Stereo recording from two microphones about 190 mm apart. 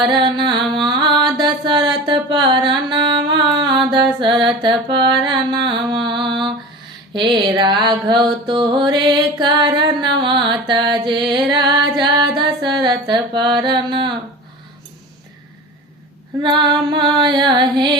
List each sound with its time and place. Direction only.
0.0 s music: 25° right (ahead or behind)
0.9 s mantra: 25° right (ahead or behind)
7.1 s music: 25° right (ahead or behind)
16.4 s music: 25° right (ahead or behind)